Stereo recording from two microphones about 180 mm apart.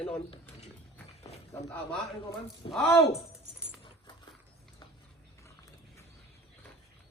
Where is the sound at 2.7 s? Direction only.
5° left (ahead or behind).